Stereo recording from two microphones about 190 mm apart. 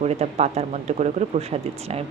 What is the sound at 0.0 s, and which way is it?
Speech, 35° right (ahead or behind).